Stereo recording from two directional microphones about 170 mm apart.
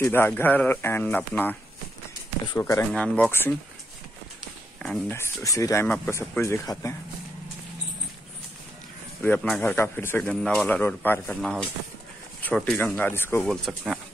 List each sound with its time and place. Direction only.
0.0 s speech: 15° left (ahead or behind)
4.8 s speech: 10° left (ahead or behind)
9.2 s speech: 5° left (ahead or behind)
13.5 s speech: centre (ahead or behind)